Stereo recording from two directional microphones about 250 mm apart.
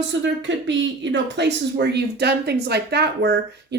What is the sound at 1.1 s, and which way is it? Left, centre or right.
Speech, right.